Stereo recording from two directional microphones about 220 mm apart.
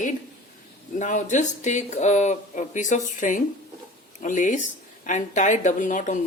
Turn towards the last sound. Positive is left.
turn(degrees=35)  # may be behind; listen again after turning